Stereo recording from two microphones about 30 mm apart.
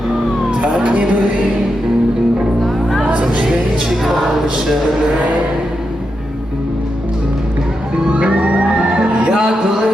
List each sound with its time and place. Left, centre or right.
0.8 s music: right
3.1 s music: right
3.8 s music: centre
8.3 s music: right
9.3 s music: right